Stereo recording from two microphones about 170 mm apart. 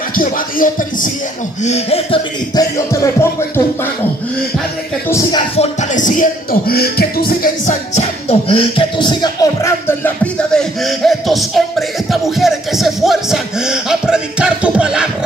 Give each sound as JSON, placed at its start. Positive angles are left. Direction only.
{"t": 0.1, "sound": "music", "side_deg": 55}
{"t": 1.6, "sound": "music", "side_deg": 40}
{"t": 2.5, "sound": "music", "side_deg": 20}
{"t": 5.6, "sound": "music", "side_deg": 45}